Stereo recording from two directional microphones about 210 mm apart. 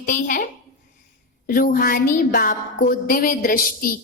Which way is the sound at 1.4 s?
40° left (ahead or behind).